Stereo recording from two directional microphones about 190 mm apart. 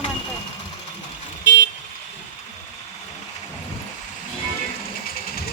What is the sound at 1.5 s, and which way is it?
Vehicle, 65° left (ahead or behind).